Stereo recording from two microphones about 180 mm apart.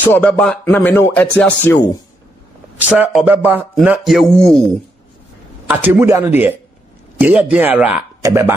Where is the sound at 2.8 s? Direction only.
10° right (ahead or behind).